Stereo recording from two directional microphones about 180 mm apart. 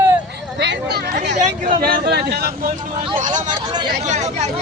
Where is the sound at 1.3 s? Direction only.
40° right (ahead or behind).